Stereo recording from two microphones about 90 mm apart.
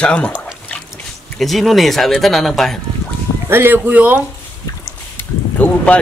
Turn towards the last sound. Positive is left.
turn(degrees=15)  # may be behind; listen again after turning